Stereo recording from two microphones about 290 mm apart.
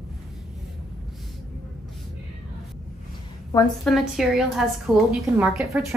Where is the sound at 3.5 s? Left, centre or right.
Centre.